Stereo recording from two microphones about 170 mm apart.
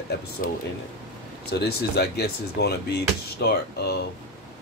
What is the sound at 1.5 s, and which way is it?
Speech, 70° left (ahead or behind).